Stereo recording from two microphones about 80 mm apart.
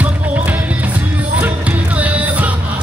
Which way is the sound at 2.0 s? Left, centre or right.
Centre.